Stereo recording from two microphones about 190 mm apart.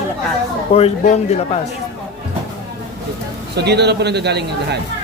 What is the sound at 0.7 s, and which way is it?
Speech, 35° left (ahead or behind).